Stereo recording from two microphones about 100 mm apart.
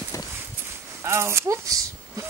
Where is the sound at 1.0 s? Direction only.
25° right (ahead or behind).